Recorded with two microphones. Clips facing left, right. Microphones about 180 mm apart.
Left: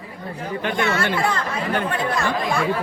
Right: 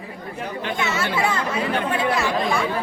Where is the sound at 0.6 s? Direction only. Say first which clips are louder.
Left 4 dB; 55° left (ahead or behind).